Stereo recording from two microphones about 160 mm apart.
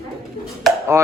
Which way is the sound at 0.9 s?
15° right (ahead or behind).